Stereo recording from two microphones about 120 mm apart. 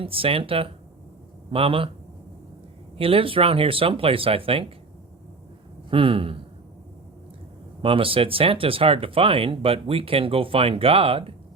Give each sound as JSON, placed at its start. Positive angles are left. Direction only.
{"t": 0.0, "sound": "speech", "side_deg": -50}
{"t": 3.0, "sound": "speech", "side_deg": -50}
{"t": 5.9, "sound": "speech", "side_deg": -50}
{"t": 7.8, "sound": "speech", "side_deg": -50}